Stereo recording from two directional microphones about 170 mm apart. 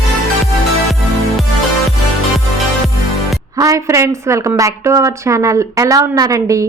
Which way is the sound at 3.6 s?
20° right (ahead or behind).